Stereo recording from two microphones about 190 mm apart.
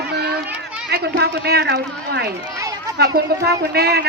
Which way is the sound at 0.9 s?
55° right (ahead or behind).